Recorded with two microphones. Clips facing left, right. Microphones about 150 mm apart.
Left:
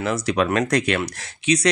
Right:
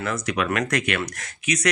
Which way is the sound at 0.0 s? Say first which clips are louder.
Left 4 dB; 30° left (ahead or behind).